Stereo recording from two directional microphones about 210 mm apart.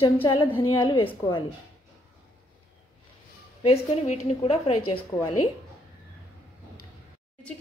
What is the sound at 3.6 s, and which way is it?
Speech, 30° left (ahead or behind).